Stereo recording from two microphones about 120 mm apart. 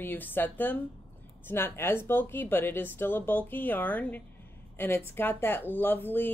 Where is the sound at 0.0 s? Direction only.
15° left (ahead or behind).